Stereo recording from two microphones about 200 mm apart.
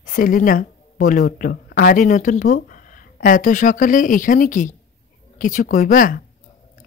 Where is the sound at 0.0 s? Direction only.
40° left (ahead or behind).